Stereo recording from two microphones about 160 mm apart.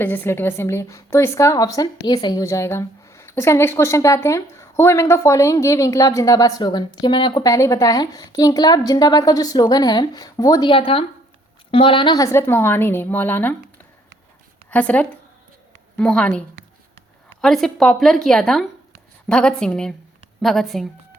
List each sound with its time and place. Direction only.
0.0 s a woman's voice: 15° left (ahead or behind)
14.7 s a woman's voice: 10° left (ahead or behind)
17.4 s speech: centre (ahead or behind)